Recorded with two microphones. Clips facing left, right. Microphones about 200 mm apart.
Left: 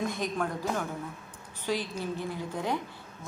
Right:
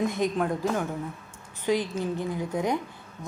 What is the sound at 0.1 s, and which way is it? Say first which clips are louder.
Speech: right 5 dB; 20° right (ahead or behind).